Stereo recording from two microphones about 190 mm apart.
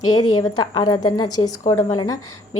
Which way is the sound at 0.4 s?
20° left (ahead or behind).